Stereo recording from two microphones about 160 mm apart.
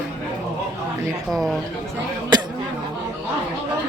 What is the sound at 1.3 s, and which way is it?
Speech, centre (ahead or behind).